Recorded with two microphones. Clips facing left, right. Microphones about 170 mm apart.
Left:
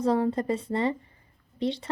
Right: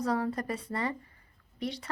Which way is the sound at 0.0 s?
25° left (ahead or behind).